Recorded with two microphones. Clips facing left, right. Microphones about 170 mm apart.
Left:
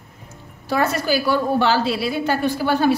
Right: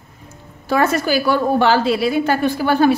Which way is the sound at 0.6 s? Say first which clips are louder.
Right 3 dB; 50° right (ahead or behind).